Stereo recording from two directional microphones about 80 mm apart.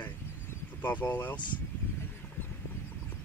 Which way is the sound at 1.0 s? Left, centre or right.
Left.